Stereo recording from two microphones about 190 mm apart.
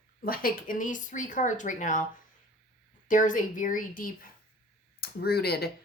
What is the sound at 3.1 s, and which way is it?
A woman's voice, 45° left (ahead or behind).